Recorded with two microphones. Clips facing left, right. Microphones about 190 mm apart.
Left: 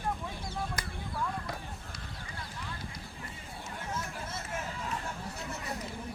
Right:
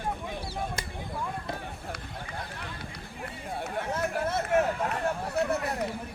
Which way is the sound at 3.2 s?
65° right (ahead or behind).